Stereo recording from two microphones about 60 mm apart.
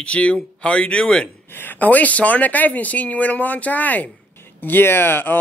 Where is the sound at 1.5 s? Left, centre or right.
Left.